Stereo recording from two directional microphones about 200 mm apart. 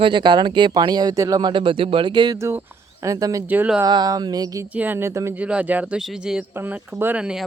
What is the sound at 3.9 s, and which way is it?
Speech, 20° right (ahead or behind).